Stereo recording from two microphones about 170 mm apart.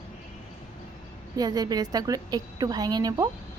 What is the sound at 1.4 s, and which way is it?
A woman's voice, 20° right (ahead or behind).